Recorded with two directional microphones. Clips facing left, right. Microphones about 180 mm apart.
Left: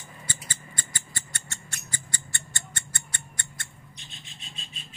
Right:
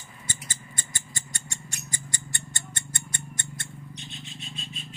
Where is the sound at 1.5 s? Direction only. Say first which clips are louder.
Right 2 dB; 15° right (ahead or behind).